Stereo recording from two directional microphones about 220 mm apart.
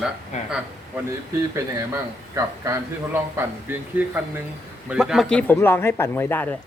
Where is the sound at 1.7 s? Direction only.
15° right (ahead or behind).